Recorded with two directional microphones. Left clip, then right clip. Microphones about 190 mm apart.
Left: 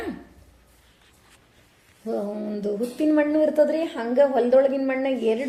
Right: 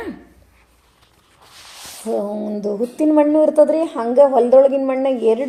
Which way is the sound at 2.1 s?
25° right (ahead or behind).